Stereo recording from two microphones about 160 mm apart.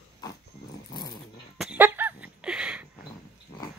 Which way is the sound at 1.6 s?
10° right (ahead or behind).